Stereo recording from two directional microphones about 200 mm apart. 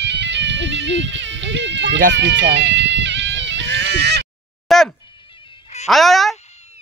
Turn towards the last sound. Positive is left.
turn(degrees=0)  # may be behind; listen again after turning